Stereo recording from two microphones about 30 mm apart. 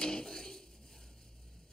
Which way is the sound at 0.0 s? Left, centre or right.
Left.